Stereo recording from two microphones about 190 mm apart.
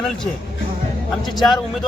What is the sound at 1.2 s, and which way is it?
Speech, 20° left (ahead or behind).